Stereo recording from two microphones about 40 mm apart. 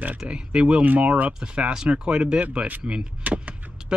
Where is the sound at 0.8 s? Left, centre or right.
Right.